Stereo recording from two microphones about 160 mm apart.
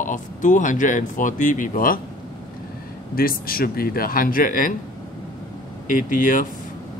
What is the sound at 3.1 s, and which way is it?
Speech, 65° left (ahead or behind).